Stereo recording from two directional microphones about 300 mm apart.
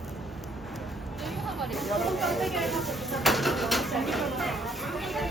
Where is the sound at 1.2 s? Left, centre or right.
Centre.